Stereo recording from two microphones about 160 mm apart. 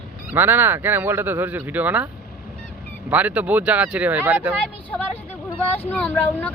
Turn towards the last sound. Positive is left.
turn(degrees=10)  # may be behind; listen again after turning